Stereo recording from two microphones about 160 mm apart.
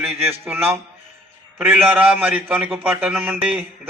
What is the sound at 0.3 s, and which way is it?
A man's voice, 15° right (ahead or behind).